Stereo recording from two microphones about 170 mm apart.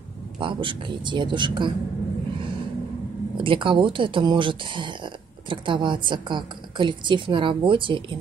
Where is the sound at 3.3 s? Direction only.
30° right (ahead or behind).